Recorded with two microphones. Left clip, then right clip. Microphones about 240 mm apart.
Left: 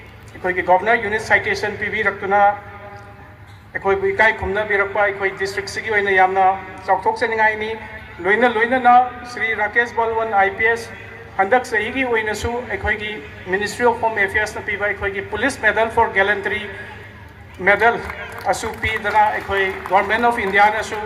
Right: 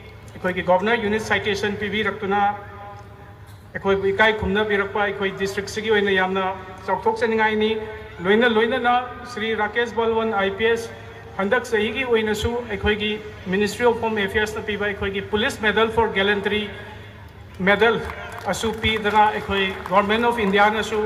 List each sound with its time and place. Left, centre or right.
0.4 s a man's voice: left
3.8 s a man's voice: left
17.7 s a man's voice: left